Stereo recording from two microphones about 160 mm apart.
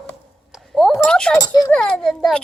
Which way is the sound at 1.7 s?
5° left (ahead or behind).